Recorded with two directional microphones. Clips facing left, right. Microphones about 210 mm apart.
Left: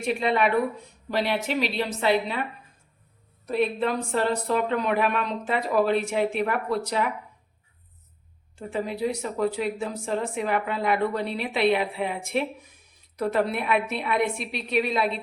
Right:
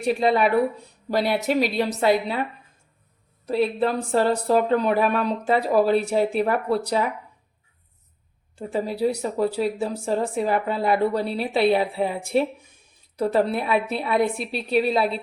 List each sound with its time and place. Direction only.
0.0 s speech: 35° right (ahead or behind)
3.4 s speech: 35° right (ahead or behind)
8.5 s speech: 35° right (ahead or behind)